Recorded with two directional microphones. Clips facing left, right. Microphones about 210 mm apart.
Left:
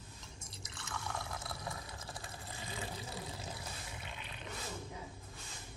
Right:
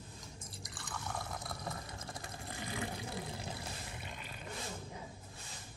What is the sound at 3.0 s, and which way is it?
Water, 60° right (ahead or behind).